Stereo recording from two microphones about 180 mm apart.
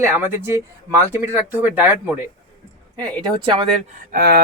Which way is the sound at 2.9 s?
25° right (ahead or behind).